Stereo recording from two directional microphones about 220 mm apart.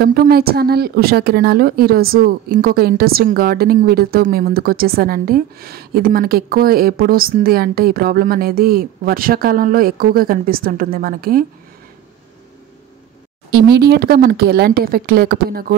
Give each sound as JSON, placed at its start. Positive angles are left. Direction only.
{"t": 0.0, "sound": "a woman's voice", "side_deg": -45}
{"t": 13.5, "sound": "a woman's voice", "side_deg": -45}